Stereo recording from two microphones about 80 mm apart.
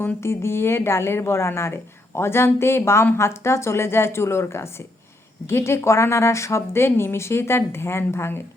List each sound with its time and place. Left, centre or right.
0.2 s speech: left